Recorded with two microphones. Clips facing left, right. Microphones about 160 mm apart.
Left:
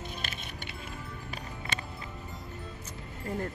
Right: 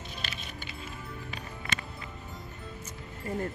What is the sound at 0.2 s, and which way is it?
Music, 50° left (ahead or behind).